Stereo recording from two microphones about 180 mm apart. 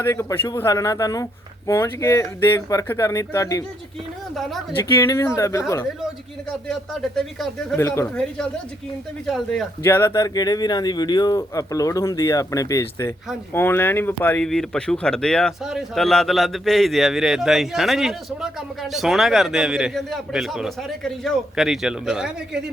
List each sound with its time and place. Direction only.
0.0 s speech: 15° left (ahead or behind)
4.4 s speech: centre (ahead or behind)
4.9 s speech: 15° left (ahead or behind)
6.7 s speech: centre (ahead or behind)
7.8 s speech: 15° left (ahead or behind)
9.8 s speech: 15° left (ahead or behind); by 22.3 s 5° right (ahead or behind)